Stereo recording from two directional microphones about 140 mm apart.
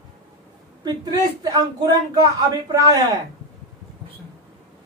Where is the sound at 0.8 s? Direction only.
30° right (ahead or behind).